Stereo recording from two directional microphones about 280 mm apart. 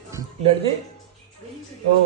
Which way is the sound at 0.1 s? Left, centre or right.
Centre.